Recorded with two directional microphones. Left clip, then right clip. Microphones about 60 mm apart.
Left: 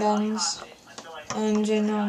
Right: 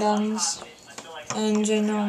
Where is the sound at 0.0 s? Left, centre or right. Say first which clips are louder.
Right 1 dB; centre.